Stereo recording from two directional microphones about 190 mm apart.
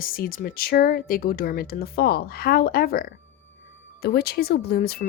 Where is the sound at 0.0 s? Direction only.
50° left (ahead or behind).